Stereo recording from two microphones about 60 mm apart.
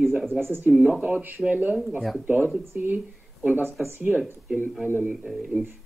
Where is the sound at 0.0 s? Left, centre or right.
Centre.